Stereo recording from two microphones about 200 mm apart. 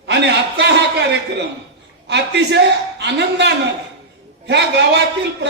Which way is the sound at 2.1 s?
60° right (ahead or behind).